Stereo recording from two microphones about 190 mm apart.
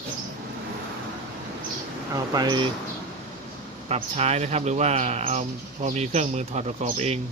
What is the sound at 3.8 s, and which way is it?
Speech, 35° right (ahead or behind).